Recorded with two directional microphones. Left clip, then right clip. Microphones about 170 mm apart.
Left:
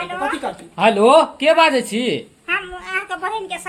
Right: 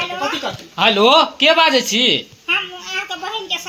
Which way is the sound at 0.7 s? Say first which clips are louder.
Even; 5° right (ahead or behind).